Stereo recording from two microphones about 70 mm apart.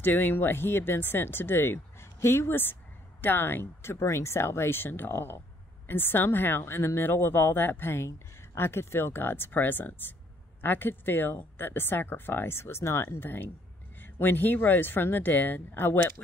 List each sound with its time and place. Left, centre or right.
0.0 s speech: left